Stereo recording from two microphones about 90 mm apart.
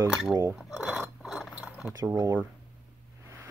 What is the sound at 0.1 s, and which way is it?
Speech, 5° right (ahead or behind).